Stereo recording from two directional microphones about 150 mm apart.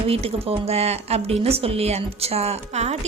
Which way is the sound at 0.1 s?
40° right (ahead or behind).